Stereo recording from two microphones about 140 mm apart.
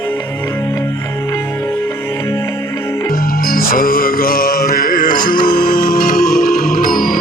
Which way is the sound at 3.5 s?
90° left.